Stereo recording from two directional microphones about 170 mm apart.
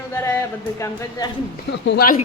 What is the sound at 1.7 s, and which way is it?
Speech, 90° left.